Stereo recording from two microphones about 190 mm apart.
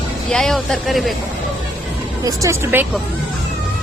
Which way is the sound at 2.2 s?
15° right (ahead or behind).